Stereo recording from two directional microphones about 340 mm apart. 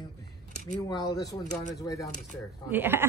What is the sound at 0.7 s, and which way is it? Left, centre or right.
Speech, centre.